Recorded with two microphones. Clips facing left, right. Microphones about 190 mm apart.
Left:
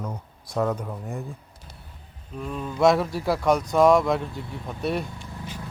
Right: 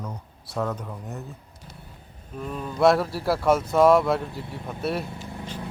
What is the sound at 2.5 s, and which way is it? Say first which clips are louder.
Speech: even; centre (ahead or behind).